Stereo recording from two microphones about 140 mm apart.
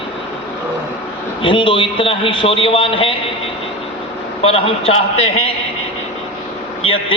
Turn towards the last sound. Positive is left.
turn(degrees=40)  # may be behind; listen again after turning